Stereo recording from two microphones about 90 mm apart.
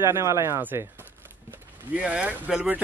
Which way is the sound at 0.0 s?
35° right (ahead or behind).